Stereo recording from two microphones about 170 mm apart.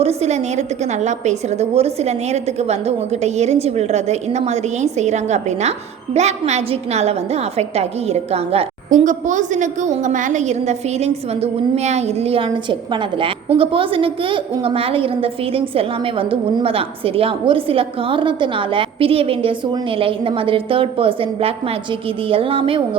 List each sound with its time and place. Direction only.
0.0 s a woman's voice: 40° right (ahead or behind)